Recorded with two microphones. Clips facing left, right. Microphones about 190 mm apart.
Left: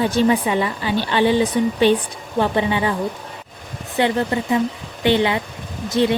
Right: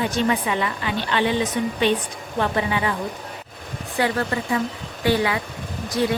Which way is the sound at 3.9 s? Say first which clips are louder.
Left 4 dB; 25° left (ahead or behind).